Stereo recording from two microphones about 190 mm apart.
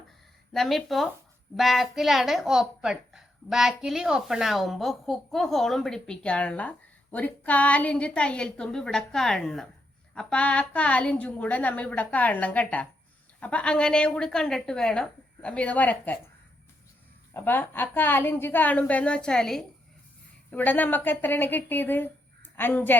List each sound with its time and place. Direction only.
0.5 s a woman's voice: centre (ahead or behind)
17.3 s a woman's voice: 10° left (ahead or behind)